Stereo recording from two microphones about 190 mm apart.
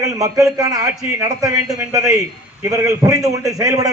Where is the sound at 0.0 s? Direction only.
20° right (ahead or behind).